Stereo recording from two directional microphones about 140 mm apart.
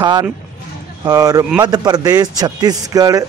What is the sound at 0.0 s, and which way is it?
Speech, 30° right (ahead or behind).